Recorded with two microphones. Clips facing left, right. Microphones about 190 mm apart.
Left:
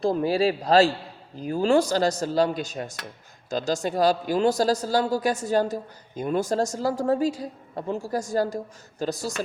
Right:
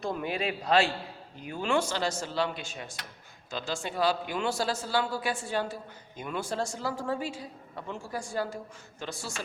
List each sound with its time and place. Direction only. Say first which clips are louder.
0.0 s a man's voice: left 10 dB; 35° left (ahead or behind)